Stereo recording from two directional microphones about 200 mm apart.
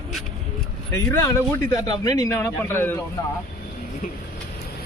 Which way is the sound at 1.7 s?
20° left (ahead or behind).